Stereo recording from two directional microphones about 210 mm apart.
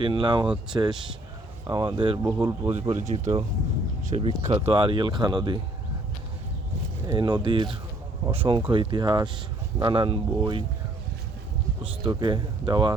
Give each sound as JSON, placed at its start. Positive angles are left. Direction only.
{"t": 0.0, "sound": "speech", "side_deg": -25}
{"t": 7.1, "sound": "speech", "side_deg": -20}
{"t": 11.8, "sound": "speech", "side_deg": -25}